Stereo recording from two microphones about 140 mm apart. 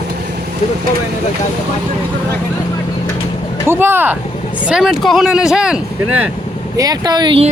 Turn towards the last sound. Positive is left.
turn(degrees=-30)  # may be behind; listen again after turning